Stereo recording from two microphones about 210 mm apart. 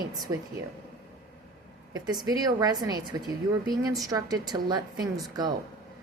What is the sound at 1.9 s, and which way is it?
A woman's voice, 20° right (ahead or behind).